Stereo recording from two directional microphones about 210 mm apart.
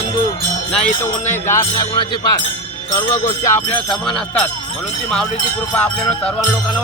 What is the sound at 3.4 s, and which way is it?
Speech, 10° left (ahead or behind).